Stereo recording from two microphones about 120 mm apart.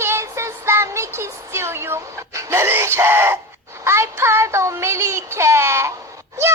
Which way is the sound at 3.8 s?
25° right (ahead or behind).